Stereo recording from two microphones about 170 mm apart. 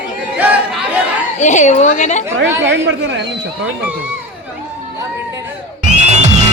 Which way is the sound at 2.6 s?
90° right.